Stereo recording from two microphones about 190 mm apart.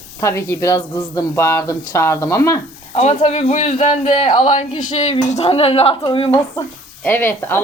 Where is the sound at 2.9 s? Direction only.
35° left (ahead or behind).